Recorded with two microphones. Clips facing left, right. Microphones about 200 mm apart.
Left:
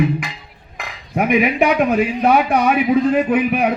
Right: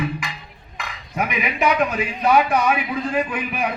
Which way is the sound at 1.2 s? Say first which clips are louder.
Left 8 dB; 55° left (ahead or behind).